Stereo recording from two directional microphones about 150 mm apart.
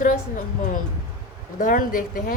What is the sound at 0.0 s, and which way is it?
A woman's voice, 60° left (ahead or behind).